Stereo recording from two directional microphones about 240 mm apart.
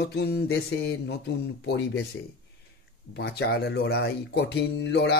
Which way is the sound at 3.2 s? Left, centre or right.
Left.